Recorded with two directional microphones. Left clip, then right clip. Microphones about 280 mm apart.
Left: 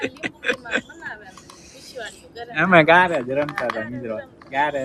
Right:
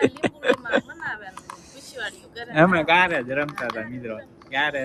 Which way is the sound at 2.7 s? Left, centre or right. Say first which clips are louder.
Left 7 dB; left.